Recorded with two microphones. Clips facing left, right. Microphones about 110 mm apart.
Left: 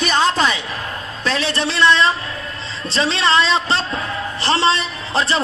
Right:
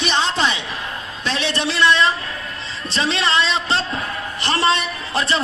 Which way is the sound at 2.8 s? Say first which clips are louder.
Left 3 dB; 35° left (ahead or behind).